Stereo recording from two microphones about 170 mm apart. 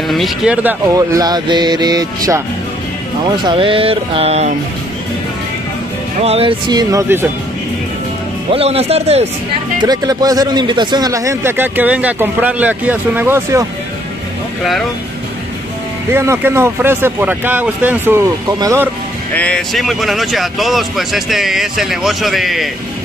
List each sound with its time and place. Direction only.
0.1 s speech: centre (ahead or behind)
0.7 s speech: 20° right (ahead or behind); by 4.6 s 40° right (ahead or behind)
6.2 s speech: 35° right (ahead or behind)
6.7 s speech: 20° right (ahead or behind)
8.5 s speech: 35° right (ahead or behind)
9.8 s speech: 25° right (ahead or behind)
16.1 s speech: 15° right (ahead or behind)
19.3 s speech: 5° left (ahead or behind)